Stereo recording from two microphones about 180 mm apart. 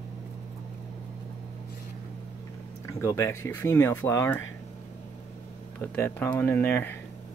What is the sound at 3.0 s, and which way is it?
Speech, 15° left (ahead or behind).